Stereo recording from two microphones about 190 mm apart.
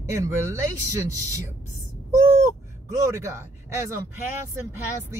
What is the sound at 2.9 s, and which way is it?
Speech, 15° right (ahead or behind).